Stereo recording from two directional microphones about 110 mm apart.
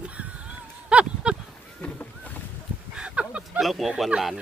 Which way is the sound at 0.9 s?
10° right (ahead or behind).